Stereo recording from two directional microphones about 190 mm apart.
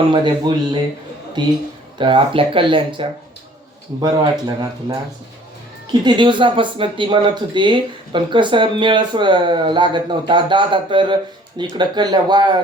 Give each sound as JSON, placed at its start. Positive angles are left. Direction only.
{"t": 0.1, "sound": "speech", "side_deg": -25}